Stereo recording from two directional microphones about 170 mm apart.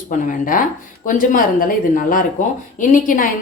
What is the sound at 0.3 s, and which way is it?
A woman's voice, 55° left (ahead or behind).